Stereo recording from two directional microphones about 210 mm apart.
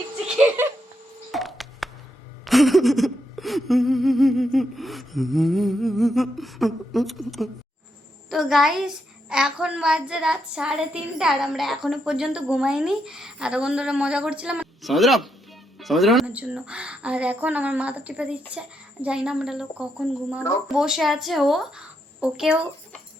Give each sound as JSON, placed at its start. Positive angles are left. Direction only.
{"t": 0.3, "sound": "a sound", "side_deg": -10}
{"t": 1.3, "sound": "telephone dialing", "side_deg": 0}
{"t": 2.4, "sound": "a child's voice", "side_deg": 0}